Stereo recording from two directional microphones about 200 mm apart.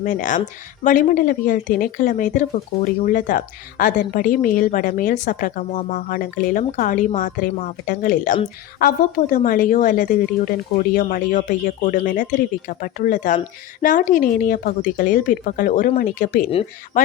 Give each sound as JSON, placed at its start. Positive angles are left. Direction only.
{"t": 0.0, "sound": "speech", "side_deg": 40}